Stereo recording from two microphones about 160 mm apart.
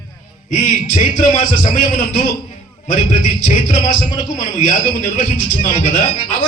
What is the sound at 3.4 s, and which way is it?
Speech, 50° left (ahead or behind).